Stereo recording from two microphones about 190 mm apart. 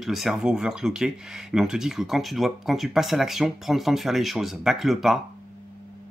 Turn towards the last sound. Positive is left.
turn(degrees=0)  # may be behind; listen again after turning